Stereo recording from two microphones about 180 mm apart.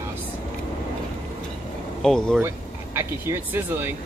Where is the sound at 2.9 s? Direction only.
15° right (ahead or behind).